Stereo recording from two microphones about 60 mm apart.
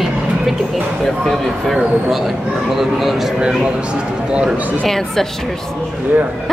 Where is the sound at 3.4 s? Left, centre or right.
Centre.